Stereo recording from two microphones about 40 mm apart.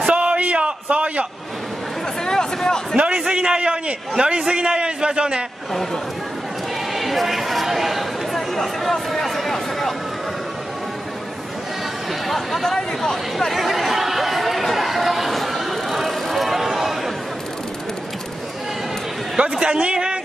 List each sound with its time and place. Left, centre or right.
0.1 s a sound: right
2.2 s speech: centre
3.2 s a man's voice: centre
7.0 s speech: centre
12.3 s chatter: centre
19.6 s a man's voice: right